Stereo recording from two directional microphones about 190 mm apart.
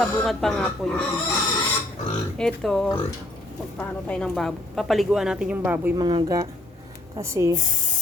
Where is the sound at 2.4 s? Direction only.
5° left (ahead or behind).